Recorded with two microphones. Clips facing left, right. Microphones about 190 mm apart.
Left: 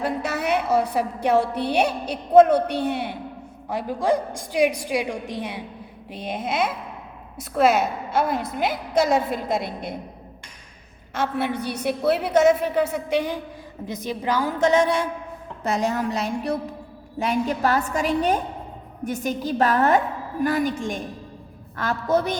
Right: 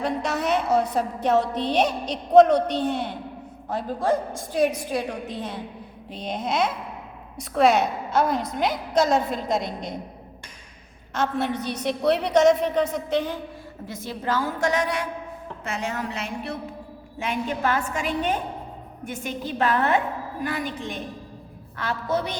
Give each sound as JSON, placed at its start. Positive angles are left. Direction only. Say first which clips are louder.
{"t": 0.0, "sound": "a woman's voice", "louder": "even", "side_deg": 5}
{"t": 11.1, "sound": "a woman's voice", "louder": "even", "side_deg": 10}